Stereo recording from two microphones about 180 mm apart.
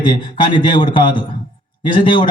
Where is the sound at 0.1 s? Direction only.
25° left (ahead or behind).